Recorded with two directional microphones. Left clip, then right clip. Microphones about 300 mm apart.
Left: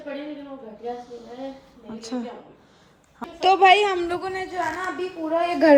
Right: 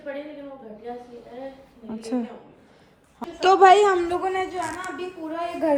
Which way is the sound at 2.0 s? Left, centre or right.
Centre.